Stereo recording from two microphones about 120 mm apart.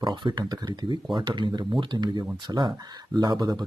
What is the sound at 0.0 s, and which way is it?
Speech, 40° right (ahead or behind).